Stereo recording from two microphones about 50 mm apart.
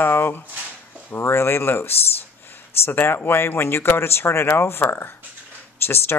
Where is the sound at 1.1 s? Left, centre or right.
Left.